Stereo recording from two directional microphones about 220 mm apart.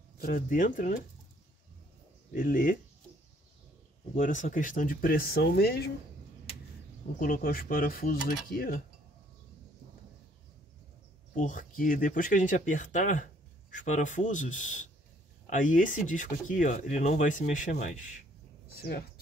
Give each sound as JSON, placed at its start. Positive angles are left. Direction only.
{"t": 0.2, "sound": "speech", "side_deg": 40}
{"t": 2.3, "sound": "speech", "side_deg": 40}
{"t": 4.1, "sound": "speech", "side_deg": 35}
{"t": 7.2, "sound": "speech", "side_deg": 40}
{"t": 11.3, "sound": "speech", "side_deg": 35}
{"t": 18.7, "sound": "speech", "side_deg": 45}